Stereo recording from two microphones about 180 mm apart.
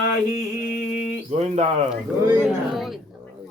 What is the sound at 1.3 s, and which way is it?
Speech, 40° right (ahead or behind).